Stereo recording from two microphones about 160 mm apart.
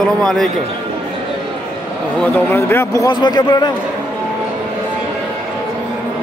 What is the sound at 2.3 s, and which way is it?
A man's voice, 15° left (ahead or behind).